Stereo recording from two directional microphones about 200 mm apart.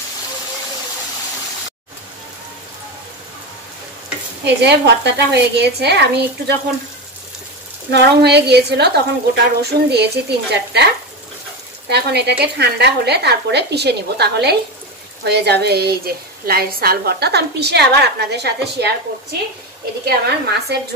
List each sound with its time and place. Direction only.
4.5 s a woman's voice: 55° right (ahead or behind)
7.9 s a woman's voice: 55° right (ahead or behind)
11.9 s a woman's voice: 55° right (ahead or behind)
20.1 s a woman's voice: 55° right (ahead or behind)